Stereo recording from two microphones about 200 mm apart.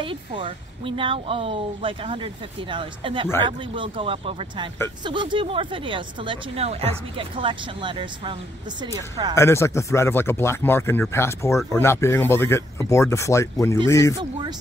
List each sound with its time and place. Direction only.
0.0 s speech: 25° right (ahead or behind)
9.3 s speech: 15° left (ahead or behind)